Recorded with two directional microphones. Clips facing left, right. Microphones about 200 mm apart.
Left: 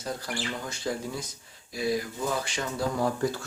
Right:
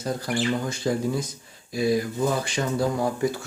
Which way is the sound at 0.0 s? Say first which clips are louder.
Right 7 dB; 20° right (ahead or behind).